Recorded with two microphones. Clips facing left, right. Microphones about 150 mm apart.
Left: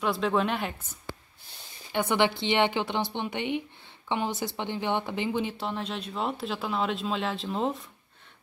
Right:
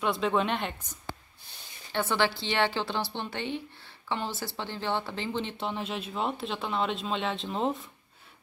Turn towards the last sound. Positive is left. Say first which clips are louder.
# left 1 dB
turn(degrees=0)  # may be behind; listen again after turning